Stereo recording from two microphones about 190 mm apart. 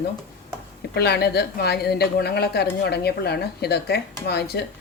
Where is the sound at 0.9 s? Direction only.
60° left (ahead or behind).